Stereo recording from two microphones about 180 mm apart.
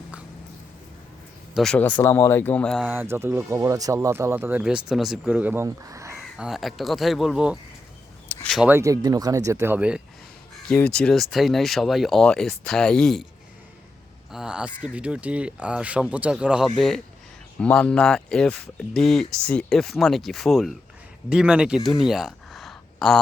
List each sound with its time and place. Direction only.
1.5 s speech: 5° left (ahead or behind)
2.0 s speech: 15° left (ahead or behind)
2.8 s speech: 10° right (ahead or behind)
6.3 s speech: centre (ahead or behind)
8.3 s a sound: 5° left (ahead or behind)
8.6 s speech: 15° right (ahead or behind)
10.7 s speech: 5° left (ahead or behind)
14.3 s speech: 5° right (ahead or behind)
21.8 s a sound: centre (ahead or behind)